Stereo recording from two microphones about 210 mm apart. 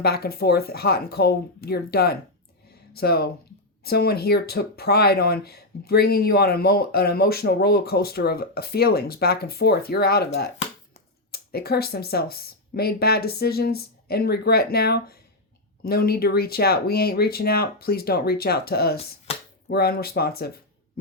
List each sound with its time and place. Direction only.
0.0 s speech: 50° left (ahead or behind)
11.3 s speech: 50° left (ahead or behind)